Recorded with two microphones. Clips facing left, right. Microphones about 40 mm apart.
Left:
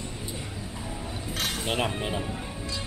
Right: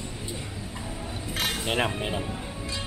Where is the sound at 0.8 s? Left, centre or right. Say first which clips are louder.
Even; centre.